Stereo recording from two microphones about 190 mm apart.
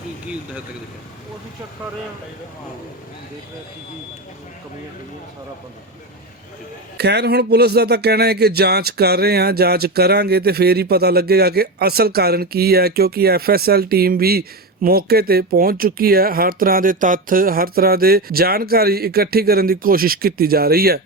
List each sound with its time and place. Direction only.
6.9 s speech: 60° right (ahead or behind)